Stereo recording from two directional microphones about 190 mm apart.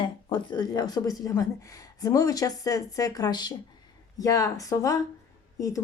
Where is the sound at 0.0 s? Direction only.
25° left (ahead or behind).